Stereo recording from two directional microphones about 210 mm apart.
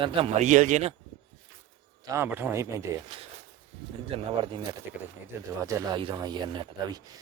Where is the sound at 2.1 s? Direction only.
10° right (ahead or behind).